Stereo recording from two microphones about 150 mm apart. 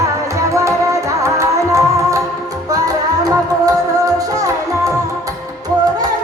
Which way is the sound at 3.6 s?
25° right (ahead or behind).